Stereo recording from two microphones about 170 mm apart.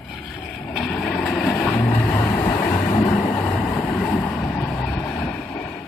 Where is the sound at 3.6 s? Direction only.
5° left (ahead or behind).